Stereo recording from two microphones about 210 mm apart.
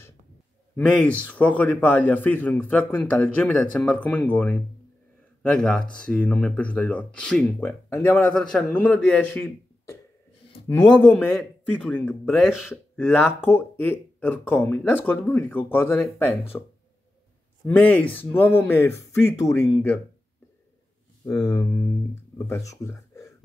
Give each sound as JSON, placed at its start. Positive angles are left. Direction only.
{"t": 0.7, "sound": "a man's voice", "side_deg": 5}
{"t": 13.0, "sound": "a man's voice", "side_deg": 10}
{"t": 17.6, "sound": "a man's voice", "side_deg": 5}
{"t": 21.4, "sound": "a man's voice", "side_deg": 15}